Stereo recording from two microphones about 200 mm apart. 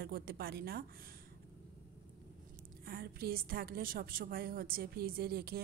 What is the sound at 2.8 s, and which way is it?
A woman's voice, 50° right (ahead or behind).